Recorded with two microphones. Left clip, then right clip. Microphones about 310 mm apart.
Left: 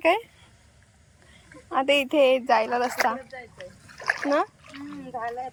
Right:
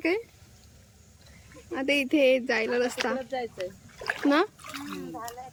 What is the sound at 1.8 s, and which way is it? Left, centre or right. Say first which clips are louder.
Speech: left 2 dB; centre.